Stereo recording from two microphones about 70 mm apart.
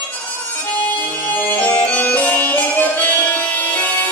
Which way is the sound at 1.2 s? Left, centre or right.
Left.